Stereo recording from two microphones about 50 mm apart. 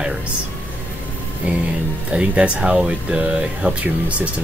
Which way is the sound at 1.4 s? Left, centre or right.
Right.